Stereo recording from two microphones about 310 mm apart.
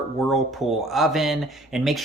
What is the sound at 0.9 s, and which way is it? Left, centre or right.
Speech, centre.